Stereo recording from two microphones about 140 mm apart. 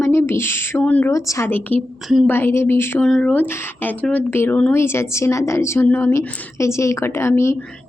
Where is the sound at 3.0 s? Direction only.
5° left (ahead or behind).